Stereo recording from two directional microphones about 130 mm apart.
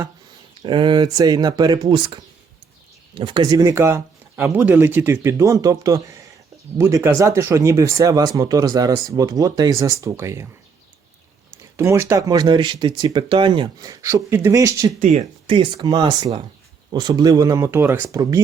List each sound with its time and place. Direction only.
0.6 s speech: 35° right (ahead or behind)
3.2 s speech: 40° right (ahead or behind); by 10.5 s 20° right (ahead or behind)
11.6 s speech: 25° right (ahead or behind)
13.9 s speech: 20° right (ahead or behind)
15.0 s speech: 60° right (ahead or behind)
15.5 s speech: 35° right (ahead or behind)